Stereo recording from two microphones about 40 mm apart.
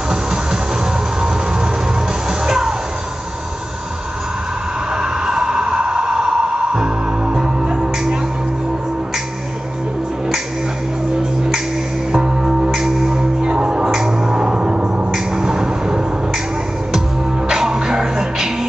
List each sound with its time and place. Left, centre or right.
0.1 s music: centre
2.2 s music: centre
4.9 s a sound: centre
12.1 s music: centre
15.1 s a sound: centre
17.5 s music: centre